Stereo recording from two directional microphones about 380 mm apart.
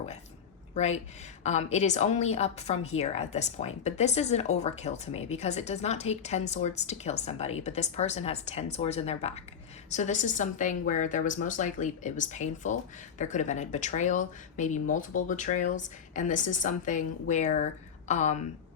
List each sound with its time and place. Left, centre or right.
0.7 s speech: centre